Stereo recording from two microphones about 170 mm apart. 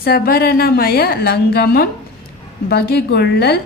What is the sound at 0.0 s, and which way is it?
A woman's voice, 60° left (ahead or behind).